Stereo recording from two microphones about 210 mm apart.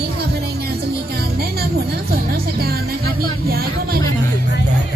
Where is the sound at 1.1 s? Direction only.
50° right (ahead or behind).